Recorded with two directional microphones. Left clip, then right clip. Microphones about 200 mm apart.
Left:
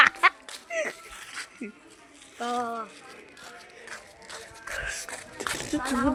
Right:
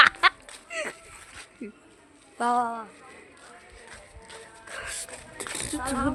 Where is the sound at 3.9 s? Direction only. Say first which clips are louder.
Left 5 dB; 65° left (ahead or behind).